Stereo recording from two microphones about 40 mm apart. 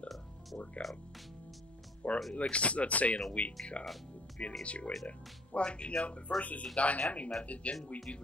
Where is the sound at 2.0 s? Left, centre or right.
Left.